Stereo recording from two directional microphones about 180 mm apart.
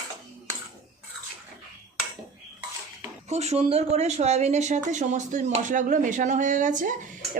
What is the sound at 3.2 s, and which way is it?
Speech, 40° right (ahead or behind).